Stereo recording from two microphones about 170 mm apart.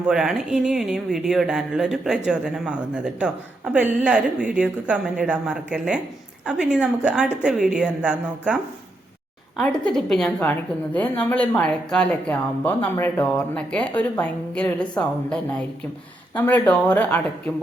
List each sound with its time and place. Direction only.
0.1 s speech: 5° right (ahead or behind)
9.6 s speech: 5° left (ahead or behind)